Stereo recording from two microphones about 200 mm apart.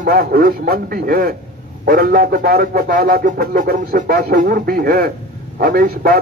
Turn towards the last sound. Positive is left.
turn(degrees=-45)  # may be behind; listen again after turning